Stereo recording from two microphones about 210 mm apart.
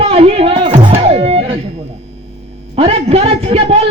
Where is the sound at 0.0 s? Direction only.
30° right (ahead or behind).